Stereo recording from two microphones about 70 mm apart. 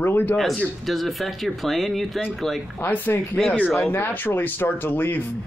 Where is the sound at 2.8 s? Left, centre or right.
Left.